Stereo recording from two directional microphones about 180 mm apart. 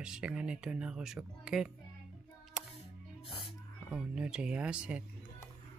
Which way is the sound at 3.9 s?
5° right (ahead or behind).